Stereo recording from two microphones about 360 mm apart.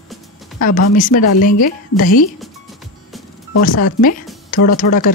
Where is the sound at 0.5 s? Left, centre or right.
Left.